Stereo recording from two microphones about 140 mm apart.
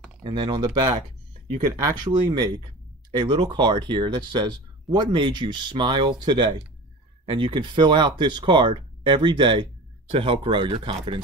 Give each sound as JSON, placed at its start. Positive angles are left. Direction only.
{"t": 0.2, "sound": "speech", "side_deg": -35}
{"t": 2.0, "sound": "speech", "side_deg": -30}